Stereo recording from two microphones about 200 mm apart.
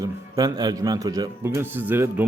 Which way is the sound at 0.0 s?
20° right (ahead or behind).